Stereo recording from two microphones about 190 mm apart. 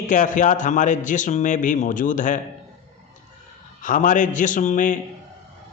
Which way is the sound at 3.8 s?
45° left (ahead or behind).